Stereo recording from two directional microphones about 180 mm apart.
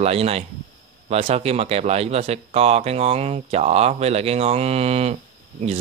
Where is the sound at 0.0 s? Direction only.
35° right (ahead or behind).